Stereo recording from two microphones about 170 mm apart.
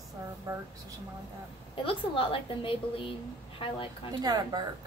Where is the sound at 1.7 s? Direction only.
30° left (ahead or behind).